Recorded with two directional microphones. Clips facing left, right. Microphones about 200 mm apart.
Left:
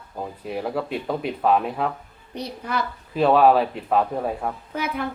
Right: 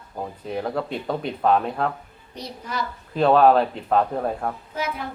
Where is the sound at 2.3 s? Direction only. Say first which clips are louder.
Left 4 dB; 60° left (ahead or behind).